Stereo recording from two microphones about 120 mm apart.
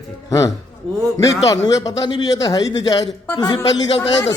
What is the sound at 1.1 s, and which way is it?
A man's voice, 30° left (ahead or behind).